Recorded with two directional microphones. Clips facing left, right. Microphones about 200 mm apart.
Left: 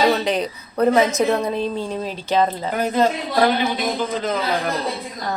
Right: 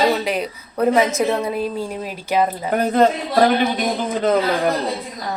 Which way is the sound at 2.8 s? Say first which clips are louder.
Right 3 dB; 55° right (ahead or behind).